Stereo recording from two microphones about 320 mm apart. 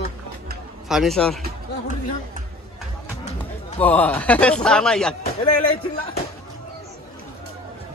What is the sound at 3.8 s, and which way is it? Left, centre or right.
Speech, centre.